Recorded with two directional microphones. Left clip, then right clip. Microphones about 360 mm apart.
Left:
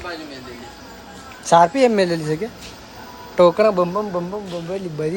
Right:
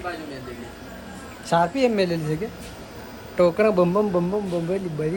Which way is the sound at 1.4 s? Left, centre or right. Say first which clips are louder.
Left 7 dB; centre.